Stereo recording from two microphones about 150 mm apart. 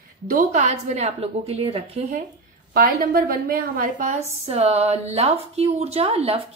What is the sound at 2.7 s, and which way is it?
A woman's voice, 85° right.